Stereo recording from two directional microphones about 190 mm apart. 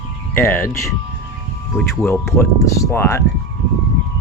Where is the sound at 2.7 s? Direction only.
15° left (ahead or behind).